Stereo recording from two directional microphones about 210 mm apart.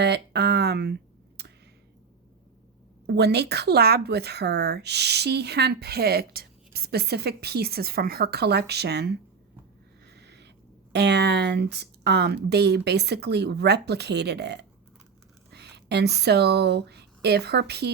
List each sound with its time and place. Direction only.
0.0 s speech: 50° right (ahead or behind)
1.4 s a sound: 50° right (ahead or behind)
3.1 s speech: 50° right (ahead or behind)
10.1 s owl: 50° right (ahead or behind)
10.9 s speech: 55° right (ahead or behind)